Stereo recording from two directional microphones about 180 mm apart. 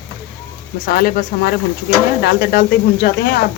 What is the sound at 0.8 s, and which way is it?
Speech, 55° left (ahead or behind).